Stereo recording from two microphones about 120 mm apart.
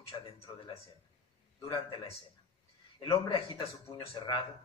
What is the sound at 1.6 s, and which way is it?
Speech, 40° left (ahead or behind).